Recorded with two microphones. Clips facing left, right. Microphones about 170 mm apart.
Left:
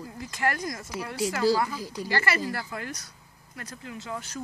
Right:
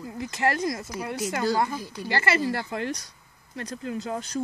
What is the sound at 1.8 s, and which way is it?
Speech, 40° left (ahead or behind).